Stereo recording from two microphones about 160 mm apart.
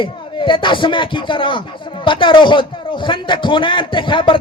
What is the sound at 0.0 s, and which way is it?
A man's voice, 30° left (ahead or behind).